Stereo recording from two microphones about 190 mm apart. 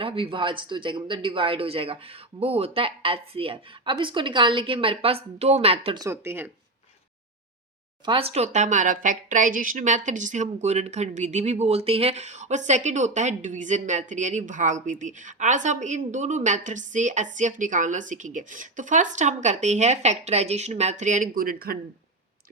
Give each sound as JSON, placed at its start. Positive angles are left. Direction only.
{"t": 0.0, "sound": "speech", "side_deg": -30}
{"t": 6.1, "sound": "speech", "side_deg": -10}
{"t": 8.0, "sound": "a woman's voice", "side_deg": -30}